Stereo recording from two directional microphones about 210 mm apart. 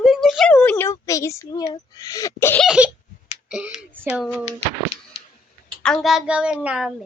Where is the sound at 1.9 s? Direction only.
15° left (ahead or behind).